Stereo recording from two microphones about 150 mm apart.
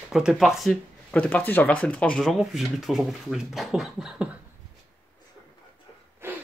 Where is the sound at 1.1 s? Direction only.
10° left (ahead or behind).